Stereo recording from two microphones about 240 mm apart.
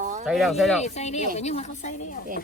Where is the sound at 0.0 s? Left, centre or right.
Right.